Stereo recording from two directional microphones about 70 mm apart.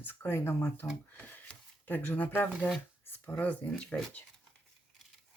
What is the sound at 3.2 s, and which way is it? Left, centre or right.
Speech, left.